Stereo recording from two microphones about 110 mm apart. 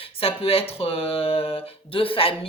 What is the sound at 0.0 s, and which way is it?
Speech, 60° left (ahead or behind).